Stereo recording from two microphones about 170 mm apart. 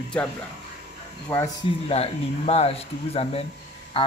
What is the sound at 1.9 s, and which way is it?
Speech, 35° left (ahead or behind).